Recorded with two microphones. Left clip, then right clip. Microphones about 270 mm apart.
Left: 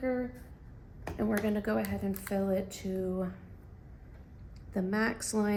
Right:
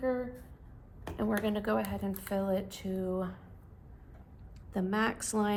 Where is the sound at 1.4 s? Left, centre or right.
Right.